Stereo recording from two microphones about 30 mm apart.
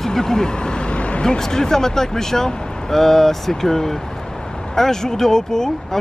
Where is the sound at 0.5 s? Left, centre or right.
Left.